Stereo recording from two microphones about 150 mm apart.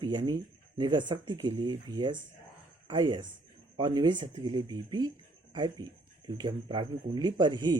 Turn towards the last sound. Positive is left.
turn(degrees=-30)  # may be behind; listen again after turning